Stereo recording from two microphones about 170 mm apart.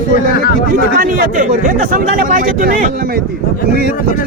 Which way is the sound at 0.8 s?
55° right (ahead or behind).